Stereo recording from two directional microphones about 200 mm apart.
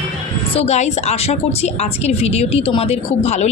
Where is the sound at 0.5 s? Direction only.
35° left (ahead or behind).